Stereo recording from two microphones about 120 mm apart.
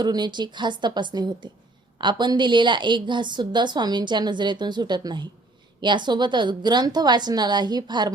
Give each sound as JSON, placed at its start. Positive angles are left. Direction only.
{"t": 0.0, "sound": "a woman's voice", "side_deg": -35}